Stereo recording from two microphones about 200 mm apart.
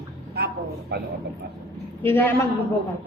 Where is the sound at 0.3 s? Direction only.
55° right (ahead or behind).